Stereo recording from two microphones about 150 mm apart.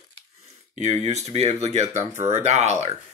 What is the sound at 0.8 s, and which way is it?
Speech, 45° right (ahead or behind).